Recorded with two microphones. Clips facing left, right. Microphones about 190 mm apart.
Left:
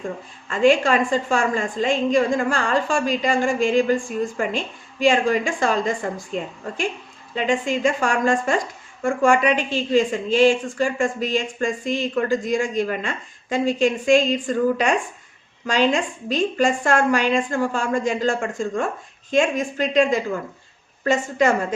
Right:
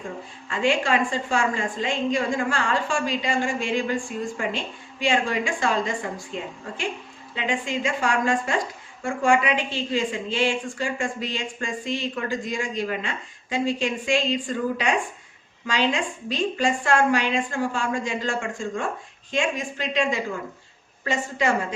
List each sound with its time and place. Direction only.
0.5 s a woman's voice: 45° left (ahead or behind)
7.3 s a woman's voice: 45° left (ahead or behind)